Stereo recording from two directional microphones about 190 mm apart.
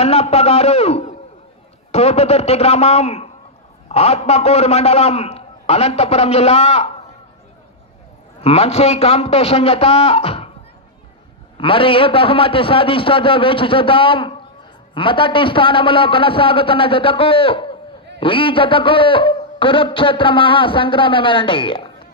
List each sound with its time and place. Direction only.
0.0 s a man's voice: 35° left (ahead or behind)
8.4 s a man's voice: 30° left (ahead or behind)
11.5 s a man's voice: 30° left (ahead or behind)